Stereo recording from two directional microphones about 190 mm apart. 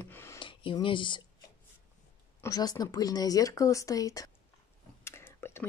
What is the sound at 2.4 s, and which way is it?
Speech, 20° left (ahead or behind).